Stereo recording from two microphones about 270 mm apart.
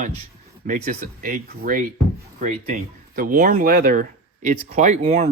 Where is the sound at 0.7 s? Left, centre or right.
Right.